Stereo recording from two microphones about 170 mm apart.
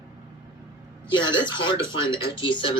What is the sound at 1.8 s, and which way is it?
Speech, 15° right (ahead or behind).